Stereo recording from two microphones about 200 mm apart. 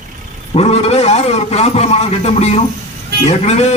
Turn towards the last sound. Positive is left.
turn(degrees=35)  # may be behind; listen again after turning